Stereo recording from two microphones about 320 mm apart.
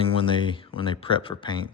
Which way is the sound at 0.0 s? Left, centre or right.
Centre.